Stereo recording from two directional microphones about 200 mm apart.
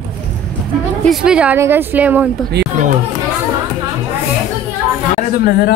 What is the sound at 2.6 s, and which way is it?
Chatter, 60° right (ahead or behind).